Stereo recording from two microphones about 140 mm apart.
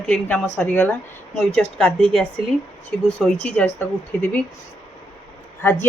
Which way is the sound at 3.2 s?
5° left (ahead or behind).